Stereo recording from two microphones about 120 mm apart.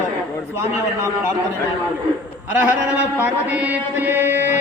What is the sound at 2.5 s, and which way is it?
Mantra, 15° right (ahead or behind).